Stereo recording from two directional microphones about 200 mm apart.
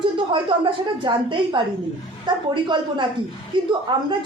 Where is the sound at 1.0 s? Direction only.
25° right (ahead or behind).